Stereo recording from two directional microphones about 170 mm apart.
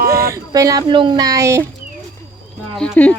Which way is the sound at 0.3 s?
20° right (ahead or behind).